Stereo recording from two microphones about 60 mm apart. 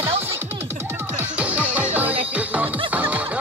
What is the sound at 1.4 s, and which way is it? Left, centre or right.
Music, right.